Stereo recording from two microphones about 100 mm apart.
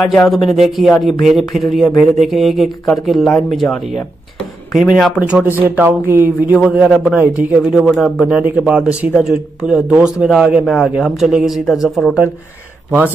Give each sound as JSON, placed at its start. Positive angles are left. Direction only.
{"t": 0.0, "sound": "speech", "side_deg": 5}
{"t": 7.2, "sound": "speech", "side_deg": -15}
{"t": 7.8, "sound": "speech", "side_deg": 0}
{"t": 8.4, "sound": "speech", "side_deg": -10}